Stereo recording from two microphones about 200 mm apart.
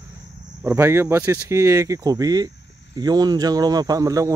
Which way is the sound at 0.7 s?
15° right (ahead or behind).